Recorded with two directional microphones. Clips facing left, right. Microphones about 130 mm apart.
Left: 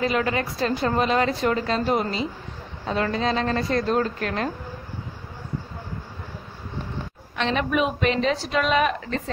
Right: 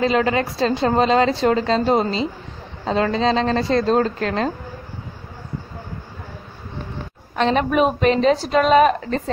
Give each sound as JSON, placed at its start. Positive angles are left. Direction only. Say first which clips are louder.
{"t": 0.0, "sound": "a woman's voice", "louder": "right 5 dB", "side_deg": -25}
{"t": 7.3, "sound": "a woman's voice", "louder": "right 6 dB", "side_deg": -40}